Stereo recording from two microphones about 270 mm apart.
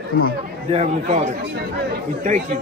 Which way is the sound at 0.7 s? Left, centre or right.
Right.